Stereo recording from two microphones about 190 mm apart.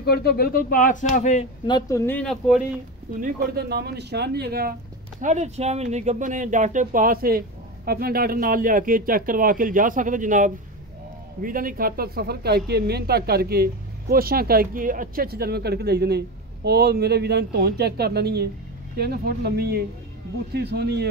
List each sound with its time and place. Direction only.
0.0 s speech: 55° left (ahead or behind); by 1.5 s 35° left (ahead or behind)
1.7 s speech: 20° left (ahead or behind); by 2.6 s centre (ahead or behind)
3.2 s speech: 55° right (ahead or behind)
5.2 s speech: 35° right (ahead or behind); by 21.1 s 60° right (ahead or behind)